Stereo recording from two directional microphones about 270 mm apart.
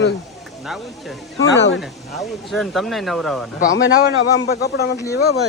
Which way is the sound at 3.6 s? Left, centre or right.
Left.